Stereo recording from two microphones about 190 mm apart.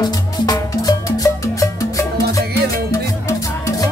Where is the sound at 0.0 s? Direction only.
20° left (ahead or behind).